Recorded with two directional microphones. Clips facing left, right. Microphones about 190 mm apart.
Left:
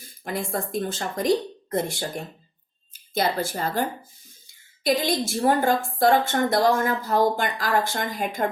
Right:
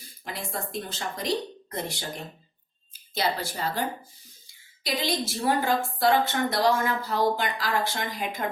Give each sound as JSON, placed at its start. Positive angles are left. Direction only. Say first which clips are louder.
{"t": 0.0, "sound": "a woman's voice", "louder": "left 7 dB", "side_deg": 50}